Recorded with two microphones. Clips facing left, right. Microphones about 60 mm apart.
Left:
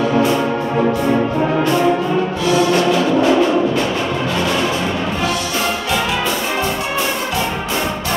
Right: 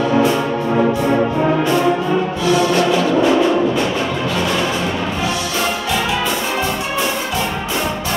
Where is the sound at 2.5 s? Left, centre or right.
Centre.